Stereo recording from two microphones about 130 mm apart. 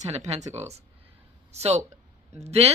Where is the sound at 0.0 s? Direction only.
60° right (ahead or behind).